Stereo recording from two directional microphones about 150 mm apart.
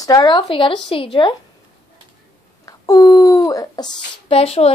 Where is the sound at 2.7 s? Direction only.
20° left (ahead or behind).